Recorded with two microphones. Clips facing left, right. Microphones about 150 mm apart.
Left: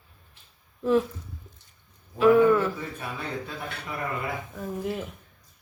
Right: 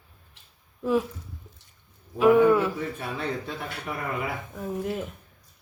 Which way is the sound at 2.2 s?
10° right (ahead or behind).